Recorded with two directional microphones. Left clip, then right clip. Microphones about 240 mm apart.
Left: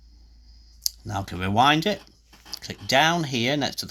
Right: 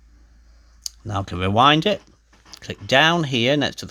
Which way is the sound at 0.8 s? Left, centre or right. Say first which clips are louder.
Right 1 dB; right.